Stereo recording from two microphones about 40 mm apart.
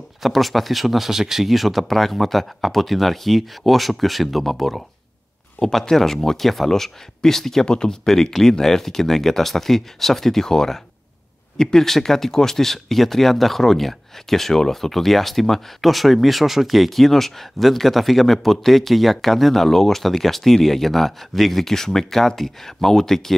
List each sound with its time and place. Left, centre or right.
0.2 s speech: centre
7.6 s speech: centre
8.1 s speech: centre